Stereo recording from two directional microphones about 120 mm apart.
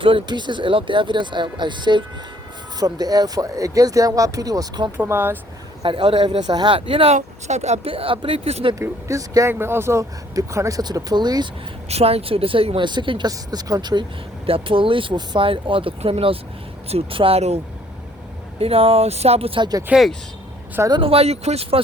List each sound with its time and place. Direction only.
0.0 s speech: 45° right (ahead or behind)
4.9 s speech: 20° right (ahead or behind)
5.8 s a woman's voice: 45° right (ahead or behind)
6.7 s a woman's voice: 50° right (ahead or behind)
7.1 s speech: 70° right (ahead or behind); by 8.7 s 55° right (ahead or behind)
8.8 s speech: 25° right (ahead or behind)
11.9 s a woman's voice: 60° right (ahead or behind); by 14.0 s 35° right (ahead or behind)
14.4 s a woman's voice: 50° right (ahead or behind)
18.6 s speech: 55° right (ahead or behind)
19.9 s speech: centre (ahead or behind)
20.9 s speech: 50° right (ahead or behind)